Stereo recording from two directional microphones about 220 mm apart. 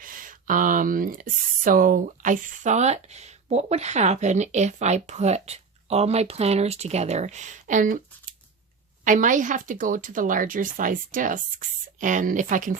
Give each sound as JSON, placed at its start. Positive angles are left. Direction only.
{"t": 0.0, "sound": "speech", "side_deg": -40}
{"t": 9.0, "sound": "speech", "side_deg": -35}